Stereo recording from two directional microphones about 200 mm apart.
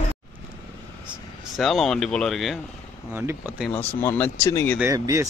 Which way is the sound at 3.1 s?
10° right (ahead or behind).